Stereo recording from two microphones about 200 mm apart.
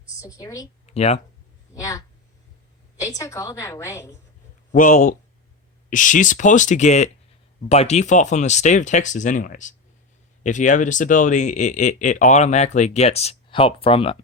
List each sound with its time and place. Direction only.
0.2 s a woman's voice: 15° left (ahead or behind)
0.9 s speech: 30° left (ahead or behind)
1.7 s a woman's voice: 15° left (ahead or behind)
4.7 s speech: 40° left (ahead or behind)